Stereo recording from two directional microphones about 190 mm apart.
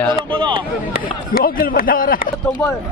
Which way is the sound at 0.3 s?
25° right (ahead or behind).